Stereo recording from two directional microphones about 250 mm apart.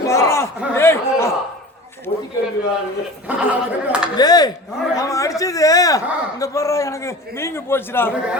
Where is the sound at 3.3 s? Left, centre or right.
Centre.